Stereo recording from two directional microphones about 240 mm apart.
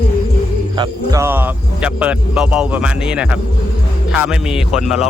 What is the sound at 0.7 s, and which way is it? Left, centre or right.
Speech, centre.